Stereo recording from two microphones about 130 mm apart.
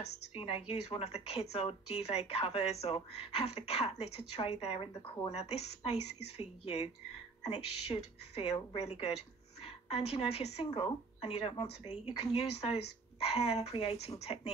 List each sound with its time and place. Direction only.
0.0 s a woman's voice: 45° left (ahead or behind)